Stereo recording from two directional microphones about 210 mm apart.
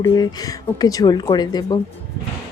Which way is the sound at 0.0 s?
15° left (ahead or behind).